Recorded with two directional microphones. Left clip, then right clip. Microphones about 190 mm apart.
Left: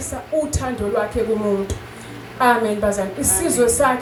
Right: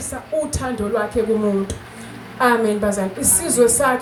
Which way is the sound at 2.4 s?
15° right (ahead or behind).